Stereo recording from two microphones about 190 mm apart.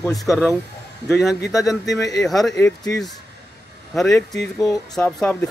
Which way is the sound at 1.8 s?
20° left (ahead or behind).